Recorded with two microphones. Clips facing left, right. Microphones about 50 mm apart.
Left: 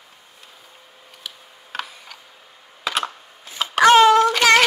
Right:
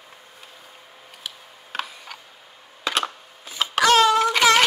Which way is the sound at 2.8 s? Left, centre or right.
Centre.